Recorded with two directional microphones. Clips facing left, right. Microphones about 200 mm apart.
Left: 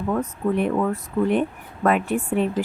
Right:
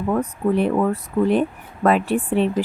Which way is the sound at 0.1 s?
35° right (ahead or behind).